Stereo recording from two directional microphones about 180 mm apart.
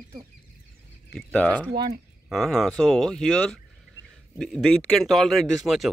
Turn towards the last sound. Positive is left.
turn(degrees=0)  # may be behind; listen again after turning